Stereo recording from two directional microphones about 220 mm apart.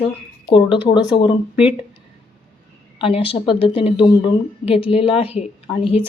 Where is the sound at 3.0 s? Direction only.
25° left (ahead or behind).